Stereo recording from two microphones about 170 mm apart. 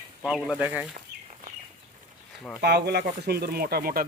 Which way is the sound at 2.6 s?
70° right (ahead or behind).